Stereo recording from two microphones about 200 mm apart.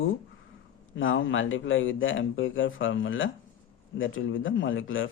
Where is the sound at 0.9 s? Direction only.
75° left (ahead or behind).